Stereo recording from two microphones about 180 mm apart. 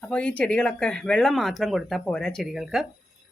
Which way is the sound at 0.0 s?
5° left (ahead or behind).